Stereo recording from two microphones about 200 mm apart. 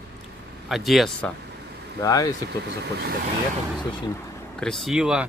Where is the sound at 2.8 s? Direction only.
55° right (ahead or behind).